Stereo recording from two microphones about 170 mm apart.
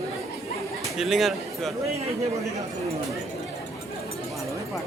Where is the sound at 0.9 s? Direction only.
Centre (ahead or behind).